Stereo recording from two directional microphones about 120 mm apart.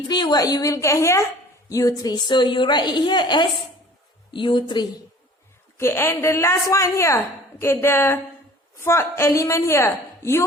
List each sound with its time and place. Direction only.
0.1 s a woman's voice: 35° left (ahead or behind)
5.7 s a woman's voice: 20° left (ahead or behind)